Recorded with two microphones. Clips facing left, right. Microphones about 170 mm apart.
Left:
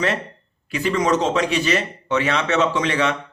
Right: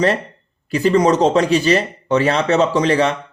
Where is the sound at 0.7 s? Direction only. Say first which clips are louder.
Right 6 dB; 35° right (ahead or behind).